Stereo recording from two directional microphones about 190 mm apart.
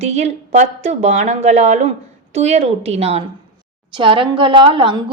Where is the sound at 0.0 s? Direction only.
35° right (ahead or behind).